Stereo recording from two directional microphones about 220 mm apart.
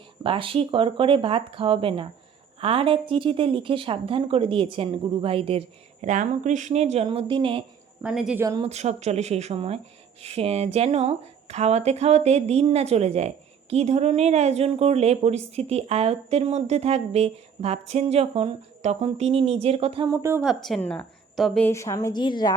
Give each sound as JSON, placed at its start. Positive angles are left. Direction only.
{"t": 0.2, "sound": "speech", "side_deg": -25}
{"t": 8.0, "sound": "a woman's voice", "side_deg": -5}
{"t": 8.4, "sound": "speech", "side_deg": -25}
{"t": 20.1, "sound": "a woman's voice", "side_deg": -10}
{"t": 20.4, "sound": "a woman's voice", "side_deg": 0}